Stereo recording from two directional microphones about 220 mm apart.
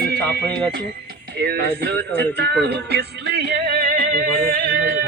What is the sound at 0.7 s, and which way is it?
Speech, 45° right (ahead or behind).